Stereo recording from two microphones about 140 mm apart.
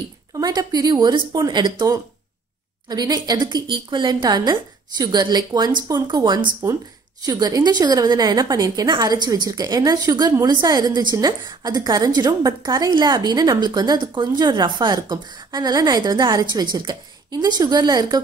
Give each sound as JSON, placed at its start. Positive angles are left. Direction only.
{"t": 0.3, "sound": "a woman's voice", "side_deg": -25}